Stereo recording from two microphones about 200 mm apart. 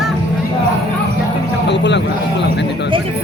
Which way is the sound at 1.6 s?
60° left (ahead or behind).